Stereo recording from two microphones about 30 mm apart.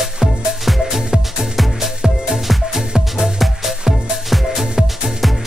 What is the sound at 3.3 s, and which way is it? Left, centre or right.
Music, centre.